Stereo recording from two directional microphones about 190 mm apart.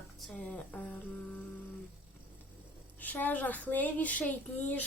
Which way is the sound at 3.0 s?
10° left (ahead or behind).